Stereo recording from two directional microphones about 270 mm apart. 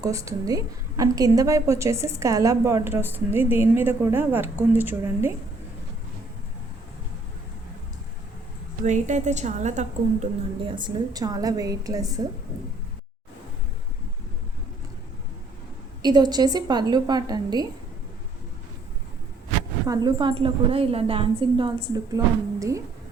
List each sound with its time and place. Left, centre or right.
0.0 s a woman's voice: centre
8.8 s a woman's voice: right
16.0 s a woman's voice: centre
19.9 s a woman's voice: centre